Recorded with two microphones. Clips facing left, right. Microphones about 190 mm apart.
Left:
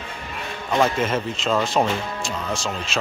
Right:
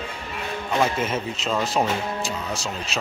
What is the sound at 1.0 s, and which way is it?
Speech, 5° right (ahead or behind).